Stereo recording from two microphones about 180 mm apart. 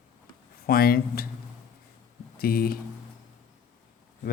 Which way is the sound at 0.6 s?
55° left (ahead or behind).